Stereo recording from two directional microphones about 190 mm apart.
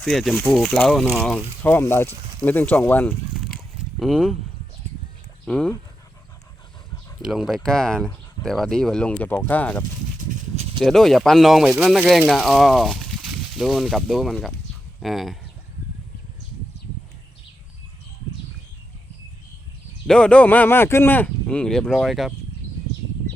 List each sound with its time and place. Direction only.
0.0 s speech: centre (ahead or behind)
5.5 s speech: 5° left (ahead or behind)
7.2 s speech: centre (ahead or behind)
10.2 s a sound: 35° right (ahead or behind)
10.8 s speech: centre (ahead or behind)
20.1 s speech: 5° left (ahead or behind)